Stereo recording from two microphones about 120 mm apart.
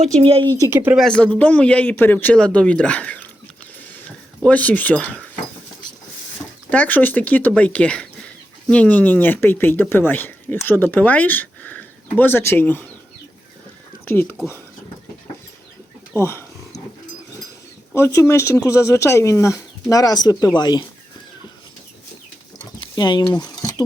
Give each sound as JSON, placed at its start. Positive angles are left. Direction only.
{"t": 0.2, "sound": "speech", "side_deg": -50}
{"t": 0.5, "sound": "speech", "side_deg": -25}
{"t": 0.9, "sound": "speech", "side_deg": 5}
{"t": 4.4, "sound": "speech", "side_deg": 10}
{"t": 6.7, "sound": "speech", "side_deg": 15}
{"t": 14.0, "sound": "speech", "side_deg": 15}
{"t": 16.1, "sound": "speech", "side_deg": 20}
{"t": 17.9, "sound": "speech", "side_deg": 20}
{"t": 22.8, "sound": "speech", "side_deg": 40}